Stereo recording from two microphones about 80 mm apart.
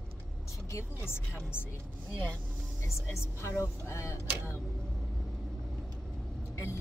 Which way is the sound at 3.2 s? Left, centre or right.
Left.